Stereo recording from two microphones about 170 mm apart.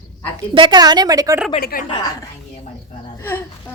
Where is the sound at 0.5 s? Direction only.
25° right (ahead or behind).